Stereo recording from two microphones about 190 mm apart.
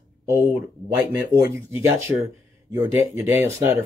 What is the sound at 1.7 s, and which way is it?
Speech, 15° right (ahead or behind).